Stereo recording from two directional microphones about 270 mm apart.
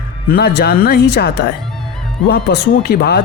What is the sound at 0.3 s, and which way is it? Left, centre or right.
Speech, left.